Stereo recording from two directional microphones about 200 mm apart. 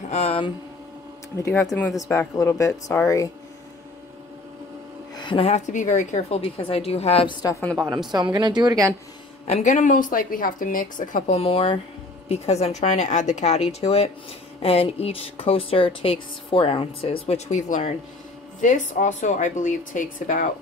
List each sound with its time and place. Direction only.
0.1 s speech: 30° left (ahead or behind)
1.3 s speech: 10° left (ahead or behind)
5.1 s speech: 25° left (ahead or behind)
7.4 s speech: 5° left (ahead or behind)
8.1 s a woman's voice: 20° right (ahead or behind)
9.5 s a woman's voice: 35° left (ahead or behind)